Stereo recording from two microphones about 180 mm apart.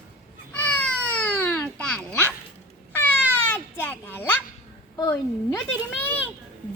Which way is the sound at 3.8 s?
10° left (ahead or behind).